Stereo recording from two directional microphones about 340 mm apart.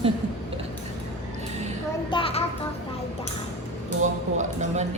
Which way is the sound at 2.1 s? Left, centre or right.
Centre.